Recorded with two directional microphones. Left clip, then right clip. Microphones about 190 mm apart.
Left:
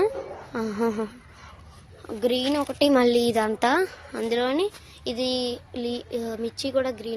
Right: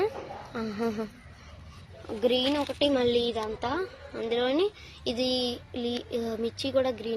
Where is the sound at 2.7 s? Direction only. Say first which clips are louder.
Left 5 dB; 35° left (ahead or behind).